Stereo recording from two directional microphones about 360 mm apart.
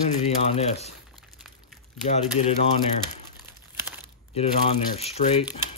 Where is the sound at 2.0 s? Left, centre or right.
Centre.